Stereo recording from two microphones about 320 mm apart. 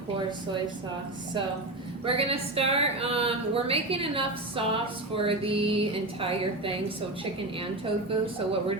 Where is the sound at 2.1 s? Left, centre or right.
Centre.